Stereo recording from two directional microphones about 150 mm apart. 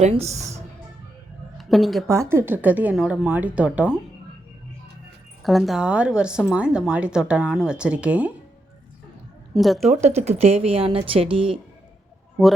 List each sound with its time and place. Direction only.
0.0 s speech: 45° right (ahead or behind)
1.5 s a woman's voice: centre (ahead or behind)
2.0 s speech: 20° right (ahead or behind)
5.4 s speech: centre (ahead or behind)
9.6 s a woman's voice: centre (ahead or behind)
9.9 s speech: 45° right (ahead or behind)